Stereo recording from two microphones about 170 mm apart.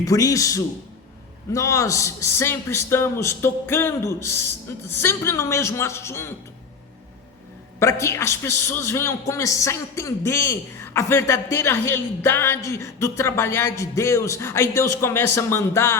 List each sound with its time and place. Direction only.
0.0 s a man's voice: 20° left (ahead or behind)
7.8 s a man's voice: 15° left (ahead or behind)